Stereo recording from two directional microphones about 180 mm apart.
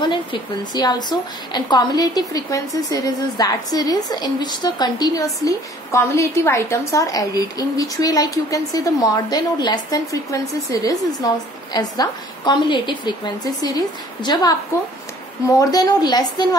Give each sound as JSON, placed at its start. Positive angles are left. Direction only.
{"t": 0.0, "sound": "a woman's voice", "side_deg": 25}
{"t": 15.7, "sound": "a woman's voice", "side_deg": 20}